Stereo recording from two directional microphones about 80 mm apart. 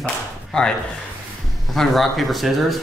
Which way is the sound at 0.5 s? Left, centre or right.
Centre.